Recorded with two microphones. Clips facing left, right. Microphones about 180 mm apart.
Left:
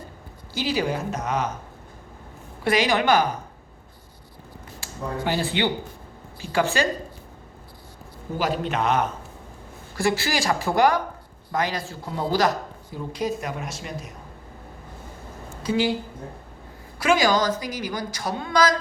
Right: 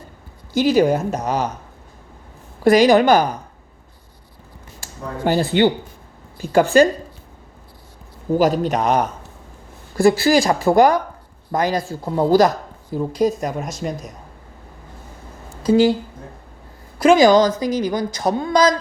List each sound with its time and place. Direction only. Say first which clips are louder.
0.5 s speech: right 10 dB; 45° right (ahead or behind)
2.6 s speech: right 9 dB; 40° right (ahead or behind)
4.8 s speech: right 4 dB; 45° right (ahead or behind)
8.4 s speech: right 7 dB; 40° right (ahead or behind)
15.6 s speech: right 9 dB; 40° right (ahead or behind)
17.0 s speech: right 9 dB; 45° right (ahead or behind)
17.7 s speech: right 9 dB; 20° right (ahead or behind)
18.2 s speech: right 6 dB; 40° right (ahead or behind)